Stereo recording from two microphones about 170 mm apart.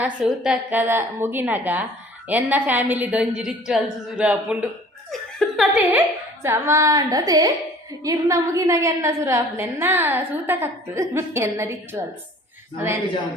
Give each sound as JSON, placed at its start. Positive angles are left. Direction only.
{"t": 0.0, "sound": "a woman's voice", "side_deg": -5}
{"t": 5.1, "sound": "laughter", "side_deg": 0}
{"t": 5.9, "sound": "a woman's voice", "side_deg": -15}